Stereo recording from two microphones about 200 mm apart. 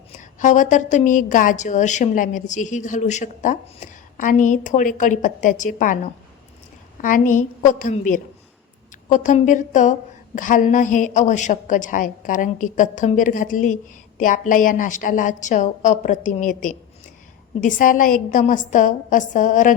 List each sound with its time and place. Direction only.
0.2 s a woman's voice: 40° left (ahead or behind)
7.0 s a woman's voice: 40° left (ahead or behind)